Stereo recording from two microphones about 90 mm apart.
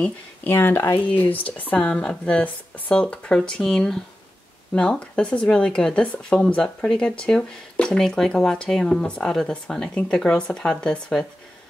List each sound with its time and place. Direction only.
0.0 s speech: 20° left (ahead or behind)
1.8 s speech: 5° left (ahead or behind)